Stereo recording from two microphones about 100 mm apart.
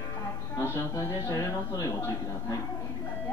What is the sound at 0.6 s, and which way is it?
Speech, 25° left (ahead or behind).